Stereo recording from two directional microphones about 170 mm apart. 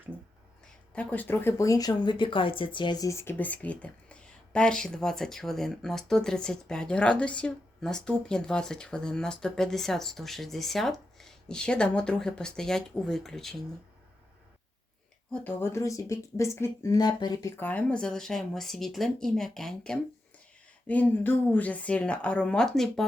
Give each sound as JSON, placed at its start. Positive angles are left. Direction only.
{"t": 0.1, "sound": "a sound", "side_deg": -10}
{"t": 0.6, "sound": "speech", "side_deg": 10}
{"t": 15.3, "sound": "a woman's voice", "side_deg": 10}
{"t": 17.6, "sound": "a woman's voice", "side_deg": 10}